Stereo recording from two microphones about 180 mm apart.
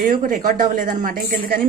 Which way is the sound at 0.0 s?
50° right (ahead or behind).